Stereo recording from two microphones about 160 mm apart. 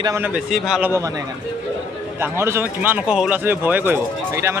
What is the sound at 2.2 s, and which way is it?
Speech, 15° right (ahead or behind).